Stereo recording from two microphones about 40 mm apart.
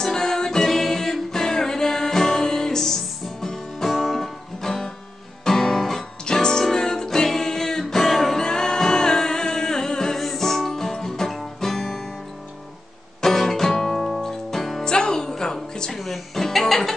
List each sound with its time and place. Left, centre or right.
0.0 s music: centre
5.4 s guitar: centre
6.2 s music: centre
13.2 s music: centre
14.9 s music: centre